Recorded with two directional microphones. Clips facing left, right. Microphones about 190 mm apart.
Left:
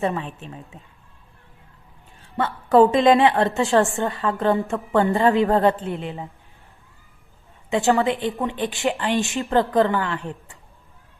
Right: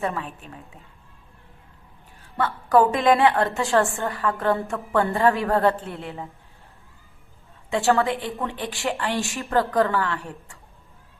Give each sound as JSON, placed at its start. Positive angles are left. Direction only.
{"t": 0.0, "sound": "a woman's voice", "side_deg": 20}
{"t": 2.4, "sound": "a woman's voice", "side_deg": 25}
{"t": 7.7, "sound": "a woman's voice", "side_deg": 20}